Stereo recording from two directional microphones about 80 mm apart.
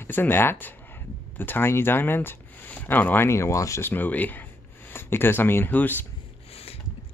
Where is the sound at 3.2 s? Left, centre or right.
Left.